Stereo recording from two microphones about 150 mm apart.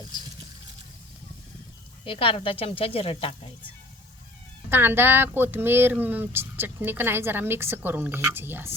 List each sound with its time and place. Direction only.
2.0 s speech: 40° left (ahead or behind)
4.7 s speech: 15° right (ahead or behind)